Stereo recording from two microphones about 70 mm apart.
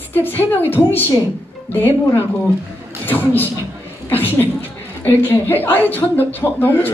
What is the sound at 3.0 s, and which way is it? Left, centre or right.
A man's voice, left.